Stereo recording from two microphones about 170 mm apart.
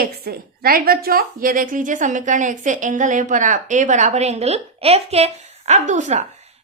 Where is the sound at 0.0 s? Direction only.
65° right (ahead or behind).